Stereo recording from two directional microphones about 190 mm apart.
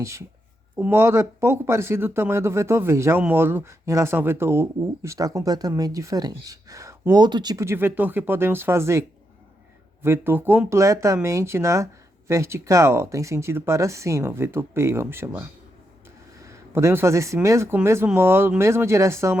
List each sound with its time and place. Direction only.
0.0 s speech: 15° right (ahead or behind)